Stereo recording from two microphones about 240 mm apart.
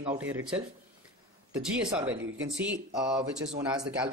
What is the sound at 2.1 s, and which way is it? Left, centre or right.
Speech, right.